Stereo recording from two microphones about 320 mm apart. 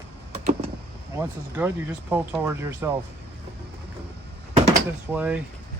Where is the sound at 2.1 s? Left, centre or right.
Centre.